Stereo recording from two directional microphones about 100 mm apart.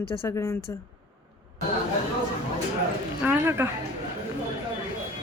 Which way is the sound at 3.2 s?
25° right (ahead or behind).